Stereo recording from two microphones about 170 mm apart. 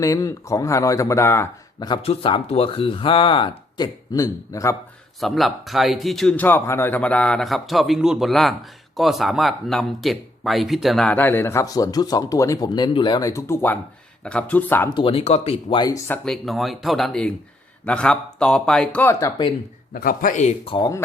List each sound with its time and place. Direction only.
0.0 s speech: 20° left (ahead or behind)
2.0 s speech: 35° left (ahead or behind); by 4.8 s 20° left (ahead or behind)
5.2 s a man's voice: centre (ahead or behind)
14.8 s speech: 30° left (ahead or behind)
16.0 s a man's voice: 5° left (ahead or behind)
19.9 s a man's voice: 55° left (ahead or behind)
20.7 s speech: 25° left (ahead or behind)